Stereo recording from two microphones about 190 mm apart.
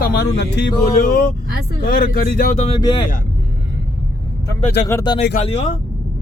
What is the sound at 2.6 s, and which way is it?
Speech, 25° left (ahead or behind).